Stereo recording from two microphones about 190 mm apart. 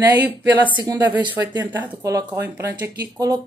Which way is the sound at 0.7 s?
25° right (ahead or behind).